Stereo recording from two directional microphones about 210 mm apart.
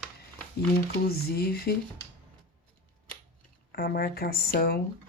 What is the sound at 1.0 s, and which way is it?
Speech, 45° left (ahead or behind).